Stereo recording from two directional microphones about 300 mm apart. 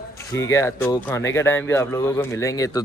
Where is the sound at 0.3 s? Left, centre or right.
Centre.